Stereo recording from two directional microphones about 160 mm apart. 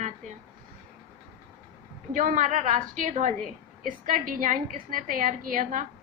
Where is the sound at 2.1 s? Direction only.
55° right (ahead or behind).